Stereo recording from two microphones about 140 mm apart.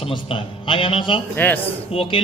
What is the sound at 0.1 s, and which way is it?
A man's voice, 40° left (ahead or behind).